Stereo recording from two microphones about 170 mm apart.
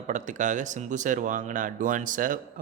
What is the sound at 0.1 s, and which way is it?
Speech, 50° right (ahead or behind).